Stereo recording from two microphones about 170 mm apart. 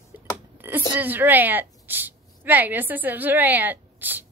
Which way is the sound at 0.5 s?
10° right (ahead or behind).